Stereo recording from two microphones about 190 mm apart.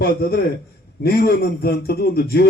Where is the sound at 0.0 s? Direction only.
55° left (ahead or behind).